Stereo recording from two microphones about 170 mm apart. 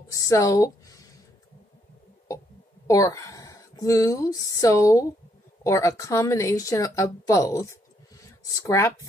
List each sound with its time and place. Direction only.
0.1 s speech: 20° left (ahead or behind)
2.9 s speech: 20° left (ahead or behind)